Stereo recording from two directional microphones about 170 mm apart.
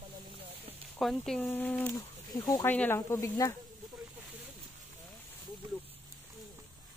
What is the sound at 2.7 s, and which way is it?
Speech, 10° left (ahead or behind).